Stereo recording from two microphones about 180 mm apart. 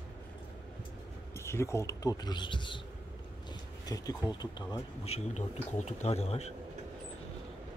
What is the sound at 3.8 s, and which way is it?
Speech, 20° left (ahead or behind).